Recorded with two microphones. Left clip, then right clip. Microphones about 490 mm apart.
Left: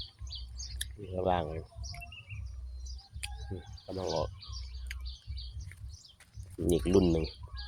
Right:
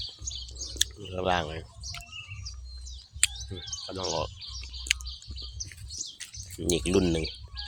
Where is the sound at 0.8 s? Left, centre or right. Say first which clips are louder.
Right 6 dB; left.